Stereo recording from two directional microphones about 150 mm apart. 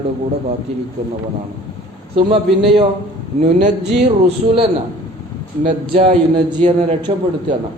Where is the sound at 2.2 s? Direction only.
35° right (ahead or behind).